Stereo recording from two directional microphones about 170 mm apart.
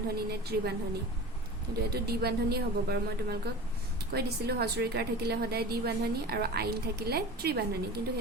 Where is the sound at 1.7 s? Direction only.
65° right (ahead or behind).